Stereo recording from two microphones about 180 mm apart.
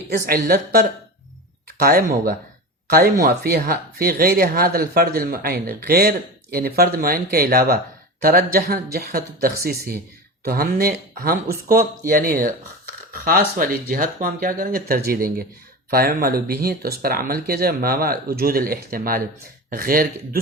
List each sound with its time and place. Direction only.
0.3 s speech: 55° right (ahead or behind)